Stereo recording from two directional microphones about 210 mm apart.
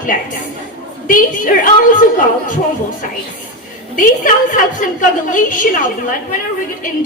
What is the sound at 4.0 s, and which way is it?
A woman's voice, 40° left (ahead or behind).